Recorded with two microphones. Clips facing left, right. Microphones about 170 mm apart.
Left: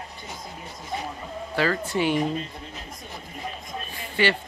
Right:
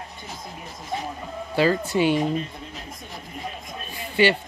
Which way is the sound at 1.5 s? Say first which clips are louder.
Right 4 dB; 20° right (ahead or behind).